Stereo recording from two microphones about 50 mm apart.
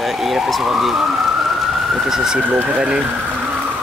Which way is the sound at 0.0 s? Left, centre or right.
Centre.